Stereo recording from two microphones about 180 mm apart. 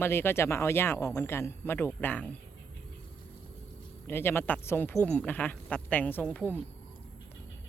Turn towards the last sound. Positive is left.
turn(degrees=10)  # may be behind; listen again after turning